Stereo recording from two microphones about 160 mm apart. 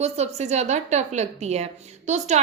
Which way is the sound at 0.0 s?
45° right (ahead or behind).